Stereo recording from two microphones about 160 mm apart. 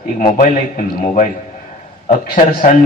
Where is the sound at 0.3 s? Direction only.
55° left (ahead or behind).